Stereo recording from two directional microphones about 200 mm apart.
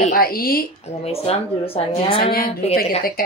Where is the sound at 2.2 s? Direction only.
45° left (ahead or behind).